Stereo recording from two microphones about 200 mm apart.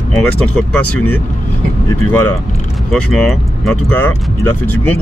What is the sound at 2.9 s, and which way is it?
Speech, centre (ahead or behind).